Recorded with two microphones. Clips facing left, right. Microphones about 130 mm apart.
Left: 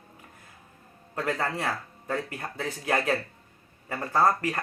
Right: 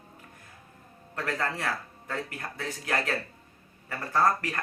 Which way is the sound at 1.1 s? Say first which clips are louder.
Left 2 dB; 20° left (ahead or behind).